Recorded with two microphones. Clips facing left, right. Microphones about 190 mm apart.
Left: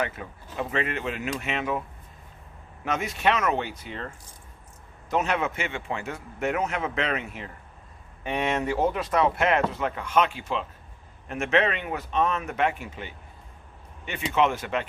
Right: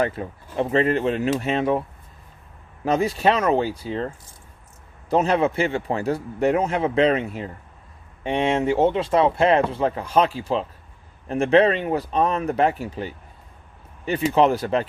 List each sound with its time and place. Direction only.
0.0 s speech: 35° right (ahead or behind)
2.8 s speech: 35° right (ahead or behind)